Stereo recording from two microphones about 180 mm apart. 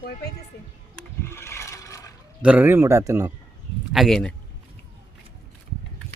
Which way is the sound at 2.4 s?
10° right (ahead or behind).